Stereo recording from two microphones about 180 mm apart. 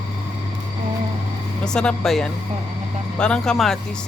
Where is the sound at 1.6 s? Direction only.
5° left (ahead or behind).